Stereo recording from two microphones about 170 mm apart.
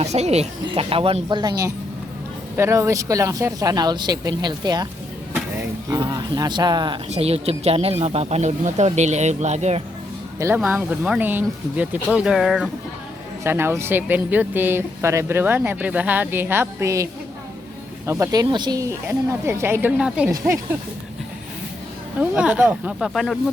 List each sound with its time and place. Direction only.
0.0 s speech: 40° right (ahead or behind); by 4.9 s 25° right (ahead or behind)
5.3 s a sound: 10° right (ahead or behind)
6.0 s speech: 25° right (ahead or behind)
7.1 s speech: 35° right (ahead or behind)
10.6 s speech: 5° right (ahead or behind)
13.4 s speech: 15° right (ahead or behind)
22.2 s speech: 5° right (ahead or behind)